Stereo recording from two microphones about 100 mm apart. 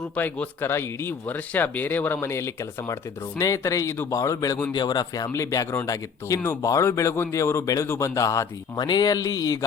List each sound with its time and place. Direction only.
0.2 s speech: 20° left (ahead or behind)
8.8 s speech: 45° left (ahead or behind)